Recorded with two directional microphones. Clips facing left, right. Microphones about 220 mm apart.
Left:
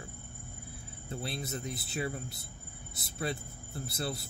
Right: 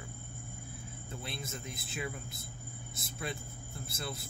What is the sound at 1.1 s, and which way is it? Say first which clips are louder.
Speech: left 6 dB; 35° left (ahead or behind).